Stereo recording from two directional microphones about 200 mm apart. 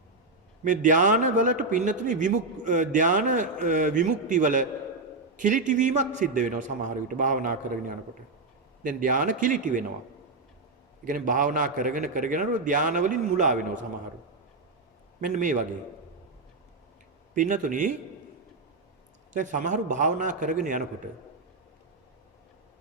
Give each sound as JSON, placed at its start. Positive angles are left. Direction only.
{"t": 0.6, "sound": "a man's voice", "side_deg": -40}
{"t": 11.0, "sound": "a man's voice", "side_deg": -40}
{"t": 15.2, "sound": "a man's voice", "side_deg": -40}
{"t": 17.3, "sound": "a man's voice", "side_deg": -40}
{"t": 19.3, "sound": "a man's voice", "side_deg": -40}